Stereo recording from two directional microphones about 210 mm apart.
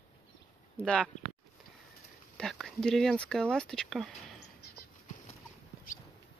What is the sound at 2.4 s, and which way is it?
Speech, centre (ahead or behind).